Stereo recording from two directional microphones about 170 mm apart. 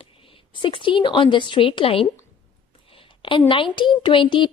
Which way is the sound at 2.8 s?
30° left (ahead or behind).